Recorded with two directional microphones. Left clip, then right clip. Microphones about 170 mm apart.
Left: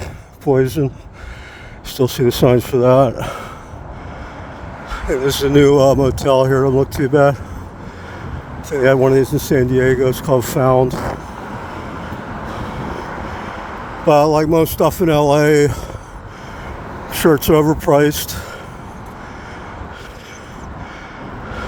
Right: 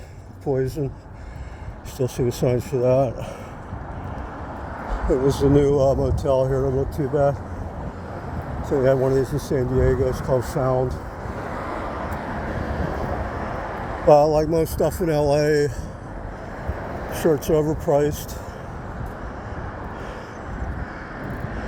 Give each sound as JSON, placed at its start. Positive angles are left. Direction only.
{"t": 0.4, "sound": "speech", "side_deg": 45}
{"t": 2.0, "sound": "speech", "side_deg": 45}
{"t": 5.2, "sound": "speech", "side_deg": 40}
{"t": 8.7, "sound": "speech", "side_deg": 40}
{"t": 14.1, "sound": "speech", "side_deg": 40}
{"t": 17.1, "sound": "speech", "side_deg": 45}